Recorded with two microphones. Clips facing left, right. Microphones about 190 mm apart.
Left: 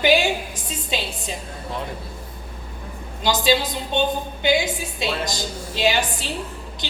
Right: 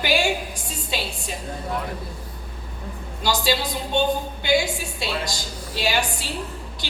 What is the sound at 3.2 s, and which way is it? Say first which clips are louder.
A woman's voice: left 3 dB; 20° left (ahead or behind).